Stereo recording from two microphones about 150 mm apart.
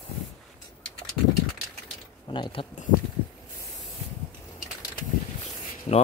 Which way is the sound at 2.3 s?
35° left (ahead or behind).